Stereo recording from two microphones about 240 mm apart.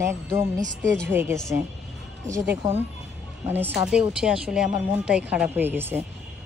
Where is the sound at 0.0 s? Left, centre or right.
Centre.